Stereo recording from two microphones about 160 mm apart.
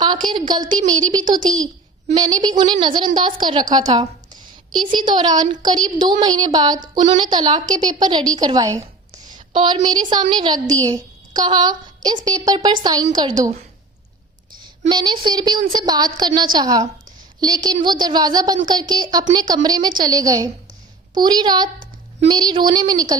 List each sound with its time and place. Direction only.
0.0 s a sound: 25° right (ahead or behind)
2.1 s a woman's voice: 25° right (ahead or behind)
5.0 s a woman's voice: 30° right (ahead or behind)
9.5 s a woman's voice: 35° right (ahead or behind)
14.8 s a woman's voice: 30° right (ahead or behind)